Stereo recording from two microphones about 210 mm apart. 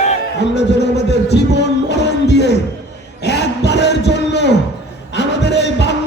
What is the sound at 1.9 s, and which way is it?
Music, 55° left (ahead or behind).